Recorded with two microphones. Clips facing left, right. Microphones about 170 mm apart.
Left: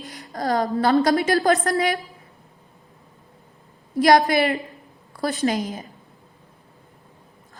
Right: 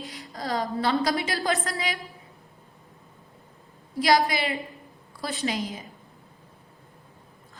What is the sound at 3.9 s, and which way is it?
A woman's voice, 55° left (ahead or behind).